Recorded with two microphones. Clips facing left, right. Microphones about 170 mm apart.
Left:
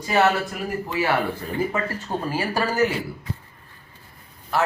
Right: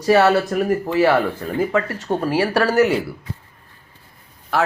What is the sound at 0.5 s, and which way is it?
Speech, 55° right (ahead or behind).